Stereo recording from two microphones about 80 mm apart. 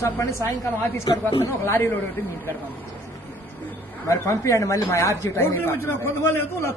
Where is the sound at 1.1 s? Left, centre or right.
Left.